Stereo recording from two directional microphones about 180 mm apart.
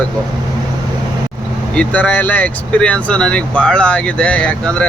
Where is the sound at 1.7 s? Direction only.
5° left (ahead or behind).